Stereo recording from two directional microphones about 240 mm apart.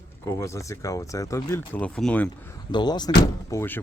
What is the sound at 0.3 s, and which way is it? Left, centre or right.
Speech, centre.